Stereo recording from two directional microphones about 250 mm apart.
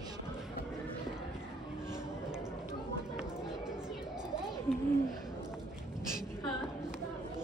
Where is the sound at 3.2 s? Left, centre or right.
Centre.